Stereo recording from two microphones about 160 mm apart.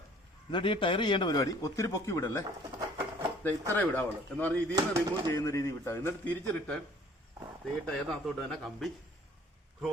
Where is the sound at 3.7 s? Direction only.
10° left (ahead or behind).